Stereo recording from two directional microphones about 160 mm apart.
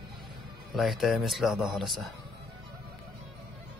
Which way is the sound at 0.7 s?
Centre (ahead or behind).